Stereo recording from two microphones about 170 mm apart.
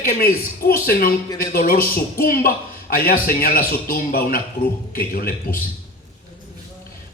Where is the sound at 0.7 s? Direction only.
60° left (ahead or behind).